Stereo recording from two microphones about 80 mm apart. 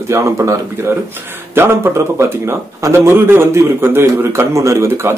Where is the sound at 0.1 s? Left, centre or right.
Right.